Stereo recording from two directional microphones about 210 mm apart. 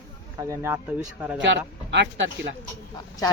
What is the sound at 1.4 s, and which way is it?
Speech, 55° right (ahead or behind).